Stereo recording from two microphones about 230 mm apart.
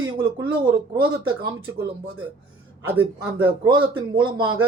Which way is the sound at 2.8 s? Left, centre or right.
Centre.